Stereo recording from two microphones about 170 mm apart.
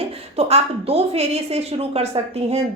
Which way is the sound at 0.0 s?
40° right (ahead or behind).